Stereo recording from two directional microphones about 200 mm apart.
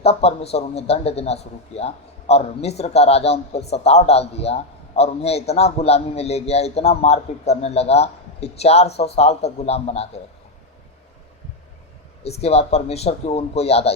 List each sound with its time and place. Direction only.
0.0 s a man's voice: 30° left (ahead or behind)
12.2 s a man's voice: 30° left (ahead or behind)